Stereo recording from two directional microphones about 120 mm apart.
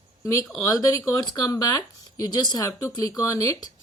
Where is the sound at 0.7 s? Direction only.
30° left (ahead or behind).